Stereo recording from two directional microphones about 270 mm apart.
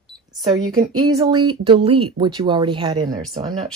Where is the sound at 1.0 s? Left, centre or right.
Centre.